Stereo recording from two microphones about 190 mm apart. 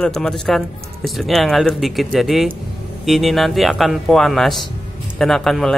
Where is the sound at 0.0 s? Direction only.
5° left (ahead or behind).